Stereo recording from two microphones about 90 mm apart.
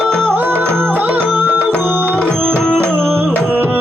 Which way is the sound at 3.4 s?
25° right (ahead or behind).